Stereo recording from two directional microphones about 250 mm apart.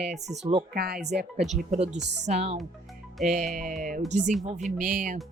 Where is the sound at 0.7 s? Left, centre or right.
Right.